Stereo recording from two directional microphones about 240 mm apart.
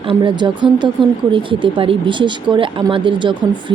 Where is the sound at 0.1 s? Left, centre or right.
Centre.